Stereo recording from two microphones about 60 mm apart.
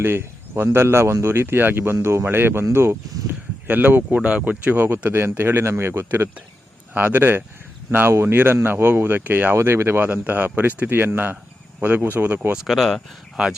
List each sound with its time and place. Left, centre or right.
0.0 s speech: right
2.2 s speech: right
3.7 s speech: right
5.0 s speech: right
6.9 s speech: right
9.6 s speech: right
12.6 s speech: centre
13.3 s speech: centre